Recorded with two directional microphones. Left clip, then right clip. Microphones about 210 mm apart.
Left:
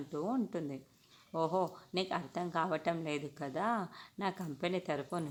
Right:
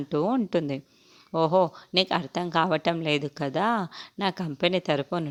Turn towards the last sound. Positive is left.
turn(degrees=-35)  # may be behind; listen again after turning